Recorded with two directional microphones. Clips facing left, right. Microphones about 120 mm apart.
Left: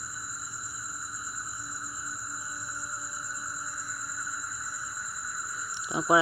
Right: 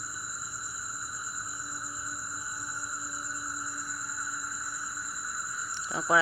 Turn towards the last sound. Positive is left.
turn(degrees=15)  # may be behind; listen again after turning